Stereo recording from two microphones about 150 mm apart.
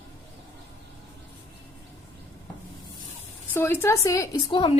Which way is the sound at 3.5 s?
15° left (ahead or behind).